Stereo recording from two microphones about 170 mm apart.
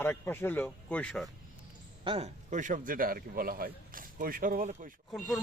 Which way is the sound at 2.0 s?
40° right (ahead or behind).